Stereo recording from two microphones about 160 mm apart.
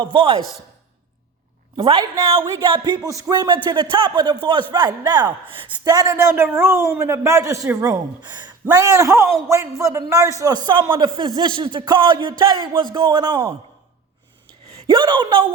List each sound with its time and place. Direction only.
0.0 s speech: 35° right (ahead or behind)
1.7 s a man's voice: 30° right (ahead or behind)
14.8 s speech: 30° right (ahead or behind)